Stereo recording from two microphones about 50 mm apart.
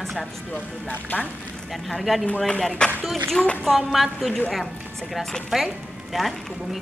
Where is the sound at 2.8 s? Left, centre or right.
Centre.